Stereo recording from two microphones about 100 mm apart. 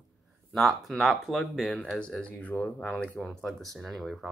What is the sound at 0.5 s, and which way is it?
Speech, centre (ahead or behind).